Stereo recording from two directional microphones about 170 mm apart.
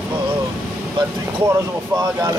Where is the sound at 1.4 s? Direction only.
20° right (ahead or behind).